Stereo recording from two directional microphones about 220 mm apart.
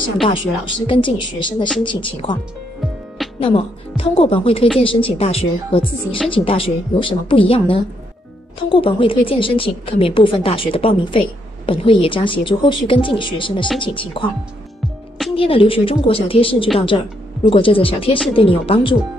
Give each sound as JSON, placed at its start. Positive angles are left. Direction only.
{"t": 0.2, "sound": "a woman's voice", "side_deg": 25}
{"t": 3.3, "sound": "a woman's voice", "side_deg": 25}
{"t": 15.3, "sound": "a woman's voice", "side_deg": 25}